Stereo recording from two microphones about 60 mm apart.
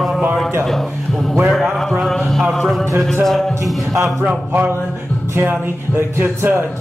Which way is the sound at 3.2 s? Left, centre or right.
Centre.